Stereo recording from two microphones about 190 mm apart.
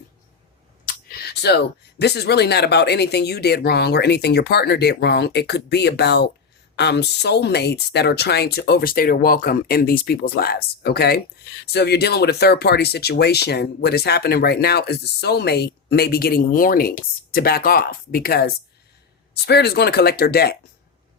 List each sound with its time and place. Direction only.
0.9 s speech: 60° left (ahead or behind)